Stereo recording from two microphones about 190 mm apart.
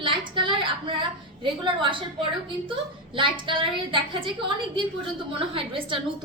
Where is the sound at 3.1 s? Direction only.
25° right (ahead or behind).